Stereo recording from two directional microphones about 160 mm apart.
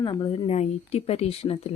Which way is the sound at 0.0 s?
30° left (ahead or behind).